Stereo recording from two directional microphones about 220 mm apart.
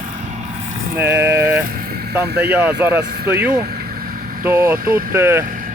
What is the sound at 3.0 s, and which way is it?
Speech, 45° right (ahead or behind).